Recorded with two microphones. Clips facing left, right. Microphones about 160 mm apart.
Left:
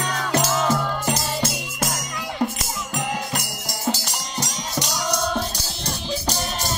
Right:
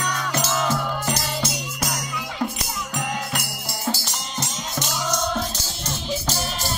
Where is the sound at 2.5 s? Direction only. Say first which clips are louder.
Left 1 dB; centre (ahead or behind).